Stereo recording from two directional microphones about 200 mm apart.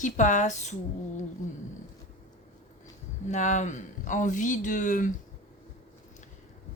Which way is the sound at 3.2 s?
35° left (ahead or behind).